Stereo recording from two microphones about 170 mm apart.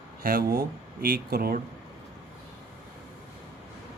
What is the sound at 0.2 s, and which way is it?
Speech, 60° right (ahead or behind).